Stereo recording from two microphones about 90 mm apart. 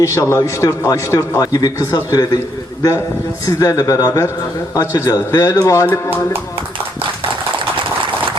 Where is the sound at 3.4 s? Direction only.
40° left (ahead or behind).